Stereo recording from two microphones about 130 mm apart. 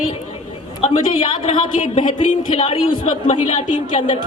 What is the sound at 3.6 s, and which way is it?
Speech, 65° left (ahead or behind).